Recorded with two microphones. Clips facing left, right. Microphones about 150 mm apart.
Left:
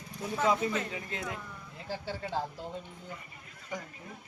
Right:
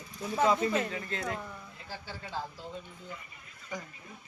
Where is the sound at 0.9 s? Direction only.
15° left (ahead or behind).